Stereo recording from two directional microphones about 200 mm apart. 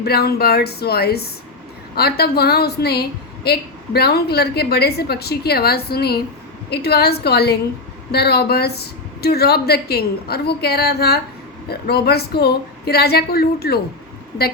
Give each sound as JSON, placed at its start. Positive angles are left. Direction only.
{"t": 0.0, "sound": "a woman's voice", "side_deg": 50}